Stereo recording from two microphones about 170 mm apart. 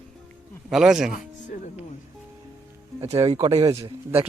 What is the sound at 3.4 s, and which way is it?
Speech, 35° right (ahead or behind).